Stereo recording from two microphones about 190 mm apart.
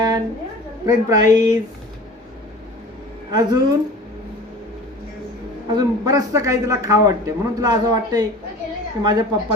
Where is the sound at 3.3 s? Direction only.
20° right (ahead or behind).